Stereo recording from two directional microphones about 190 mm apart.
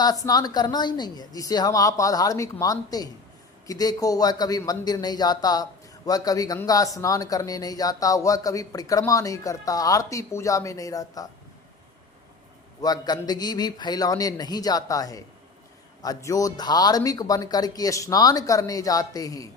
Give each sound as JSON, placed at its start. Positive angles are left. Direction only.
{"t": 0.0, "sound": "a man's voice", "side_deg": 20}
{"t": 12.8, "sound": "a man's voice", "side_deg": 20}